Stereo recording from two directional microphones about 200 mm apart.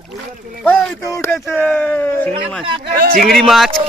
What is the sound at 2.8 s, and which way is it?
Speech, 45° right (ahead or behind).